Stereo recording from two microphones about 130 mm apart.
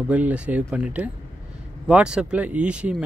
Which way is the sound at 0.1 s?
10° right (ahead or behind).